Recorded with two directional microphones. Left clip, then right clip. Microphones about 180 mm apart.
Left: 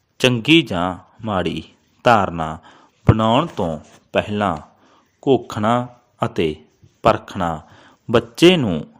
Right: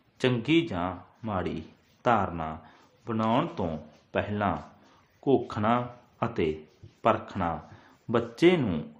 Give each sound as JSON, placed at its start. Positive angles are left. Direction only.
{"t": 0.2, "sound": "a man's voice", "side_deg": 45}